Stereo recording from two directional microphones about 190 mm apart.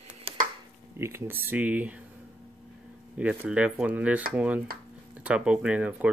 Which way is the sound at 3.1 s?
5° right (ahead or behind).